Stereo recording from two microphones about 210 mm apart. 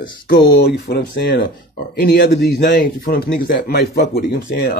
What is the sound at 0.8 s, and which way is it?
Speech, 55° left (ahead or behind).